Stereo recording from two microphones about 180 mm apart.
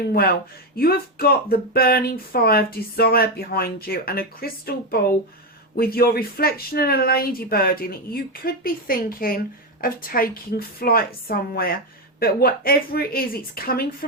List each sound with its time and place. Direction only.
0.1 s a woman's voice: 55° left (ahead or behind)